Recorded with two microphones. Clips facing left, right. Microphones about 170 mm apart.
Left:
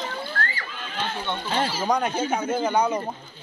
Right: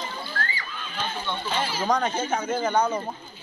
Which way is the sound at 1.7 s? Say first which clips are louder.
Right 2 dB; 5° left (ahead or behind).